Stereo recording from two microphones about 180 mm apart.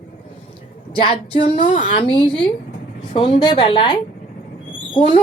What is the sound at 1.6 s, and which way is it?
Speech, 45° left (ahead or behind).